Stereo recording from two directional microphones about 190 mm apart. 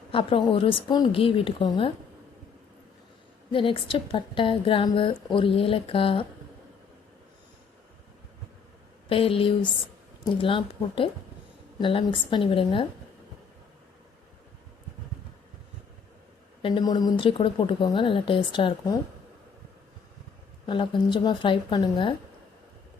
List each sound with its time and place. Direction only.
0.1 s a woman's voice: 30° left (ahead or behind)
3.5 s a woman's voice: 25° left (ahead or behind)
9.0 s a woman's voice: 30° left (ahead or behind)
16.6 s a woman's voice: 25° left (ahead or behind)
20.7 s a woman's voice: 25° left (ahead or behind)